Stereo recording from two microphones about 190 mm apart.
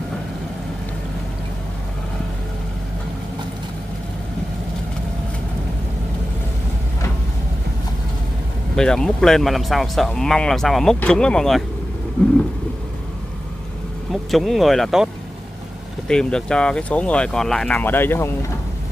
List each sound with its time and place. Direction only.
8.7 s speech: 5° left (ahead or behind)
14.3 s speech: centre (ahead or behind)
16.1 s speech: 5° left (ahead or behind)